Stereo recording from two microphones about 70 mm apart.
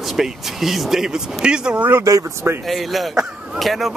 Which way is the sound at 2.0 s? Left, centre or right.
Right.